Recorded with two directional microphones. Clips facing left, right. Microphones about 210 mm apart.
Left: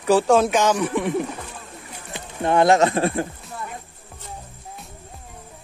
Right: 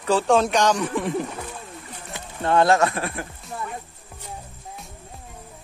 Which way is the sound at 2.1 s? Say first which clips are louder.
Left 1 dB; 15° left (ahead or behind).